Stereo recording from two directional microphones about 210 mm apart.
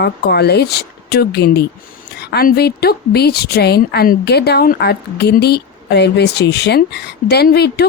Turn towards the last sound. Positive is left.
turn(degrees=50)  # may be behind; listen again after turning